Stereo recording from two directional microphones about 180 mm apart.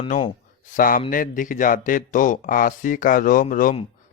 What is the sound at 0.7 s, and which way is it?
Speech, 50° left (ahead or behind).